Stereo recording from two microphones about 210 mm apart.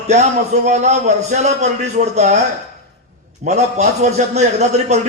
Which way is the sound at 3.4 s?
35° right (ahead or behind).